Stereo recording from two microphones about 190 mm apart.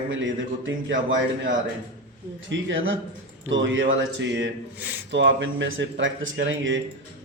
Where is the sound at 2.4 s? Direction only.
90° right; by 4.5 s 75° right (ahead or behind).